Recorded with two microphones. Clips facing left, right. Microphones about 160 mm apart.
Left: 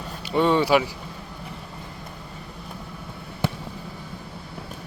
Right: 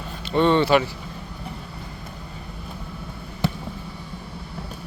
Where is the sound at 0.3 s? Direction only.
10° left (ahead or behind).